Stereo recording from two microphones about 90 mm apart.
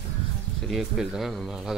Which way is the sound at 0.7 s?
5° right (ahead or behind).